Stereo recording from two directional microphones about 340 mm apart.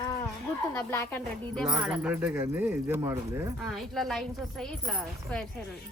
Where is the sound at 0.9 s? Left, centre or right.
Centre.